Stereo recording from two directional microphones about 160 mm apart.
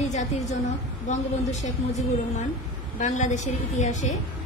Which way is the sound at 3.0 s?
50° left (ahead or behind).